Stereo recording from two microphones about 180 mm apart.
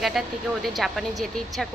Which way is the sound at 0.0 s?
Centre (ahead or behind).